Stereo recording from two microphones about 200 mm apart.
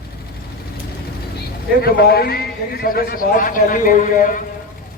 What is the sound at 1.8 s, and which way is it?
A man's voice, 50° left (ahead or behind).